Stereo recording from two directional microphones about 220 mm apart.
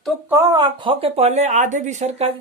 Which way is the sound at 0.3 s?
15° right (ahead or behind).